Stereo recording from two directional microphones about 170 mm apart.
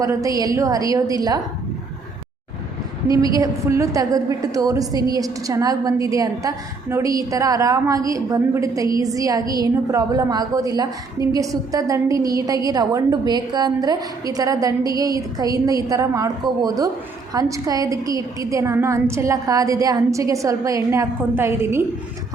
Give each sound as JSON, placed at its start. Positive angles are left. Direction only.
{"t": 0.0, "sound": "a woman's voice", "side_deg": -20}
{"t": 3.3, "sound": "a woman's voice", "side_deg": -20}